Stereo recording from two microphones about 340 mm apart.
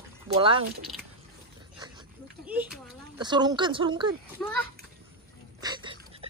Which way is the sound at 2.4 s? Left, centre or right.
Centre.